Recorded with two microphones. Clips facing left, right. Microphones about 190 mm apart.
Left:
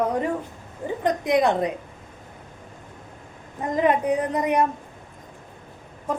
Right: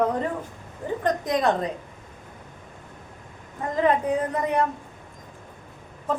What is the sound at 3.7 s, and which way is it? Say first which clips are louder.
Speech: left 1 dB; 15° left (ahead or behind).